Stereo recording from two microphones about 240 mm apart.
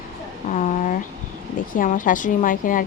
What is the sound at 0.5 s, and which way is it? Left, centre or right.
A woman's voice, left.